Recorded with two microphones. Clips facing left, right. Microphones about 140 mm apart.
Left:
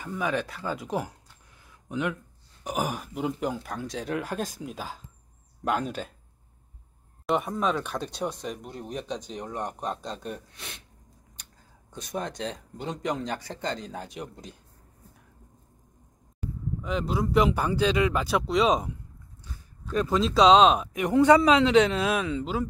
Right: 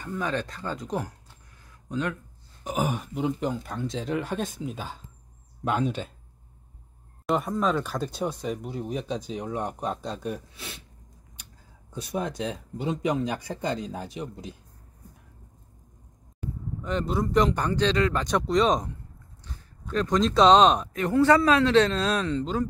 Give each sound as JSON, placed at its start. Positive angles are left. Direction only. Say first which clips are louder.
{"t": 0.0, "sound": "a man's voice", "louder": "left 1 dB", "side_deg": 10}
{"t": 2.6, "sound": "speech", "louder": "right 2 dB", "side_deg": 5}
{"t": 7.2, "sound": "speech", "louder": "right 1 dB", "side_deg": 0}
{"t": 11.9, "sound": "speech", "louder": "right 3 dB", "side_deg": -5}
{"t": 16.8, "sound": "a man's voice", "louder": "right 1 dB", "side_deg": 0}
{"t": 20.9, "sound": "a man's voice", "louder": "left 1 dB", "side_deg": 15}